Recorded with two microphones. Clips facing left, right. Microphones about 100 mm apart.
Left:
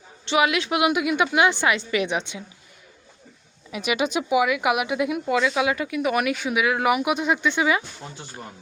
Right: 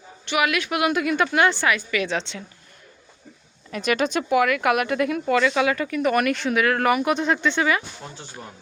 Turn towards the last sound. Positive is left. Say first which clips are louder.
# even
turn(degrees=15)  # may be behind; listen again after turning